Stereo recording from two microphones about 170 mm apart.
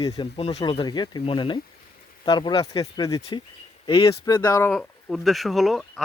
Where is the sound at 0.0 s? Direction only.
25° left (ahead or behind).